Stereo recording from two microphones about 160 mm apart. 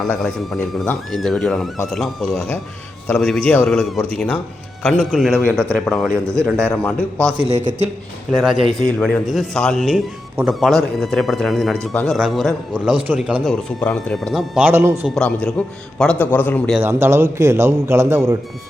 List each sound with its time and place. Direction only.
0.1 s a man's voice: 10° left (ahead or behind)
1.1 s speech: centre (ahead or behind)
5.4 s a man's voice: 10° left (ahead or behind)
6.1 s a man's voice: 20° right (ahead or behind)
6.4 s a man's voice: 5° left (ahead or behind)
7.4 s speech: 45° right (ahead or behind)
8.3 s speech: 5° right (ahead or behind)
8.9 s speech: 5° left (ahead or behind); by 15.1 s 10° right (ahead or behind)
15.1 s a man's voice: 5° left (ahead or behind)
16.8 s a man's voice: 15° right (ahead or behind)